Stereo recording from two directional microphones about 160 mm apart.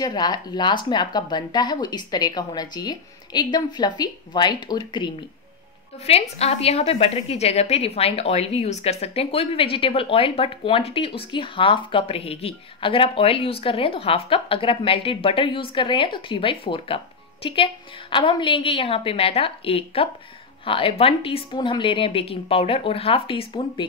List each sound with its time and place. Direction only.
0.0 s speech: 25° left (ahead or behind)
6.0 s a woman's voice: 40° left (ahead or behind)